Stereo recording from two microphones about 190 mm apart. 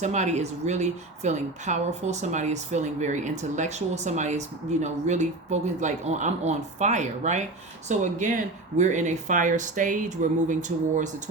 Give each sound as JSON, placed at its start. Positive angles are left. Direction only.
{"t": 0.0, "sound": "speech", "side_deg": -40}